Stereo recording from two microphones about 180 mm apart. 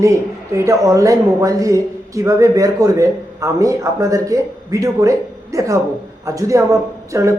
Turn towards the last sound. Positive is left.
turn(degrees=-15)  # may be behind; listen again after turning